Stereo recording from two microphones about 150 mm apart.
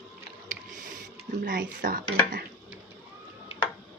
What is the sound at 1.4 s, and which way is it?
Dishes, 70° right (ahead or behind).